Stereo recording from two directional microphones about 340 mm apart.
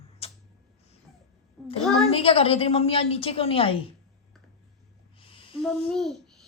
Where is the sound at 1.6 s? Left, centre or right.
Centre.